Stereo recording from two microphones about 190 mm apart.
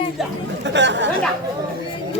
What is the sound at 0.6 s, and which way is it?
Speech, 70° right (ahead or behind).